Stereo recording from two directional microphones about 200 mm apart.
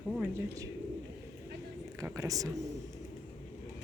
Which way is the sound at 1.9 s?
15° right (ahead or behind).